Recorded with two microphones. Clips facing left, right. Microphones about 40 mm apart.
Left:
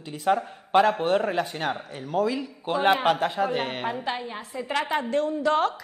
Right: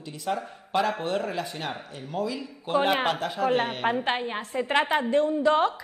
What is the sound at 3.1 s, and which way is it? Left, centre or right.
Speech, left.